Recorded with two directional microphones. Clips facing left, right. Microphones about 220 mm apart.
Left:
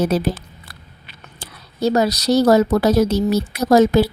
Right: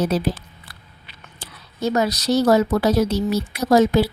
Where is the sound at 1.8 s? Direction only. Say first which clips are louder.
Left 3 dB; 35° left (ahead or behind).